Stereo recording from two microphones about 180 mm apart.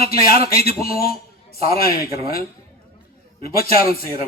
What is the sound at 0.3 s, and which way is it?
Speech, 35° right (ahead or behind).